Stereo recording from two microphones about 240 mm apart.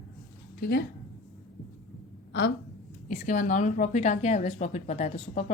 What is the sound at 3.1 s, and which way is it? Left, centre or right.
Speech, left.